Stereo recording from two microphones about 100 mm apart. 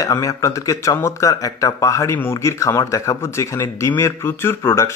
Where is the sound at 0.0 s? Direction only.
35° left (ahead or behind).